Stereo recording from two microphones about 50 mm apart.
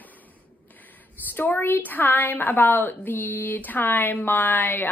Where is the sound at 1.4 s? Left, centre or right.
Left.